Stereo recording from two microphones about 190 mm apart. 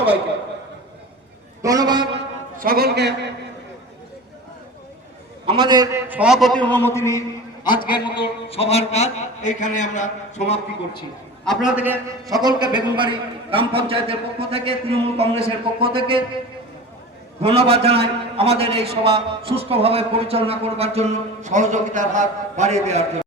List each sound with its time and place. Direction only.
1.6 s a man's voice: 20° right (ahead or behind)
2.6 s a man's voice: 50° right (ahead or behind)
5.5 s a man's voice: 25° right (ahead or behind); by 11.0 s 35° left (ahead or behind)
11.4 s a man's voice: 5° right (ahead or behind)
12.3 s a man's voice: 20° right (ahead or behind)
17.4 s a man's voice: 30° right (ahead or behind)